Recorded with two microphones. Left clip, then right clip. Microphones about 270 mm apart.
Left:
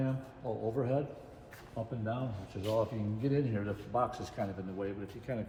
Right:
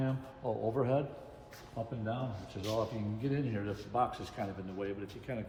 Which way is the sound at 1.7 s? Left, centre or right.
Centre.